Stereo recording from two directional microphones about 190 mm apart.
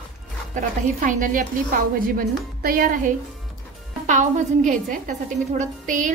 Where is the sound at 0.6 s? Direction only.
40° right (ahead or behind).